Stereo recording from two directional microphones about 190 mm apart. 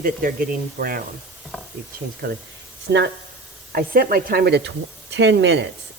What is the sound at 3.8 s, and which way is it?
Speech, 50° right (ahead or behind).